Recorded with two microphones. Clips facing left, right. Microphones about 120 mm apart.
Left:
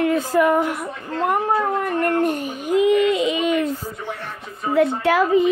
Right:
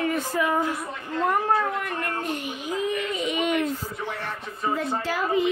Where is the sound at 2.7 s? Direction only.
80° left.